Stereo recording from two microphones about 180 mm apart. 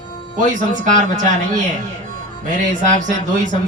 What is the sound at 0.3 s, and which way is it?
Speech, 45° right (ahead or behind).